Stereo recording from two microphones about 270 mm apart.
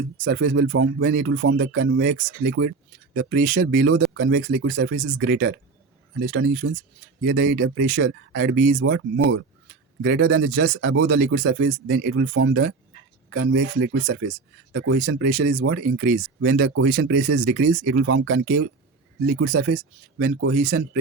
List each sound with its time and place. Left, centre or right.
0.3 s speech: right
15.4 s speech: right